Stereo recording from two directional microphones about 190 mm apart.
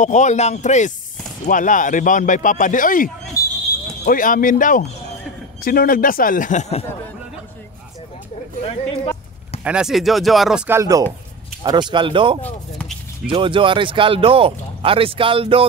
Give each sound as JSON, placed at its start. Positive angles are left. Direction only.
{"t": 0.0, "sound": "speech", "side_deg": 40}
{"t": 8.6, "sound": "music", "side_deg": 30}
{"t": 9.7, "sound": "speech", "side_deg": -5}
{"t": 10.7, "sound": "speech", "side_deg": -15}
{"t": 12.4, "sound": "a sound", "side_deg": 5}
{"t": 13.3, "sound": "speech", "side_deg": -25}